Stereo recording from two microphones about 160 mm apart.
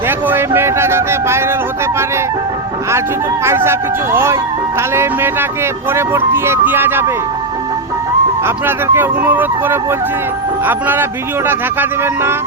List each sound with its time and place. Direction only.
0.3 s a sound: 15° right (ahead or behind)
3.4 s speech: 15° right (ahead or behind)
8.4 s speech: 15° right (ahead or behind)